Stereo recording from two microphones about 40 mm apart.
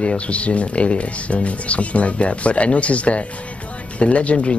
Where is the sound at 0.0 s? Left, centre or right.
Left.